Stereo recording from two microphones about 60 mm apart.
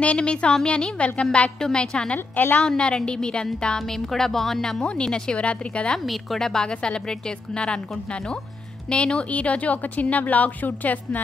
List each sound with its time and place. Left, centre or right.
0.0 s speech: centre
2.1 s a woman's voice: left
2.6 s speech: centre
6.0 s speech: centre
8.8 s a woman's voice: centre